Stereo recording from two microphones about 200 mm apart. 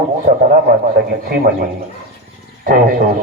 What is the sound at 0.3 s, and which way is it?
Speech, 55° right (ahead or behind).